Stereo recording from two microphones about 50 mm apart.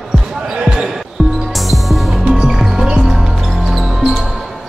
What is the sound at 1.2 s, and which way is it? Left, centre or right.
Music, centre.